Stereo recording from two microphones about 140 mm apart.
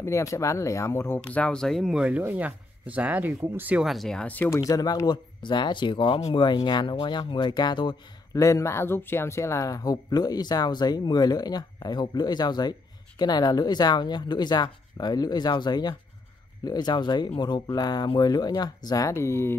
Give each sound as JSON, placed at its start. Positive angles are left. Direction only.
{"t": 0.0, "sound": "speech", "side_deg": 20}
{"t": 4.6, "sound": "speech", "side_deg": 25}